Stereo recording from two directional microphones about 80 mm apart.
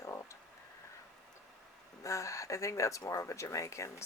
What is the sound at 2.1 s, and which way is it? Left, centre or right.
Speech, left.